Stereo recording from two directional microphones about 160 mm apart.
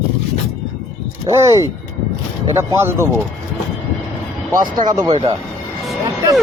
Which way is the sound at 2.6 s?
15° right (ahead or behind).